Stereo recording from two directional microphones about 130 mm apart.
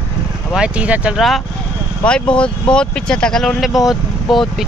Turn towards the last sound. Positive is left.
turn(degrees=0)  # may be behind; listen again after turning